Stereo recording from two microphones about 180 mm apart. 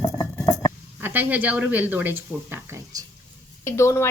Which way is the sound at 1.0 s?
10° right (ahead or behind).